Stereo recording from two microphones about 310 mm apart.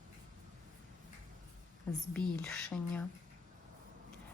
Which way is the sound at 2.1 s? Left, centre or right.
Centre.